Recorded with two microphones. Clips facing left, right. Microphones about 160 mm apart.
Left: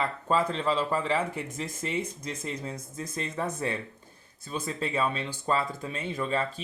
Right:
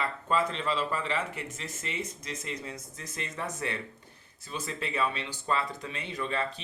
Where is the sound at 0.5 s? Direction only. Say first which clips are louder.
Left 4 dB; 40° left (ahead or behind).